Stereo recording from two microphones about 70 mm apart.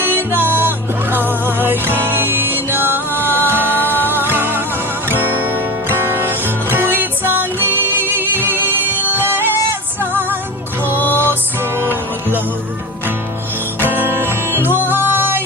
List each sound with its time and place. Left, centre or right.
0.0 s music: right
3.8 s music: left
4.1 s music: right
10.9 s music: left
11.8 s music: right
13.7 s music: right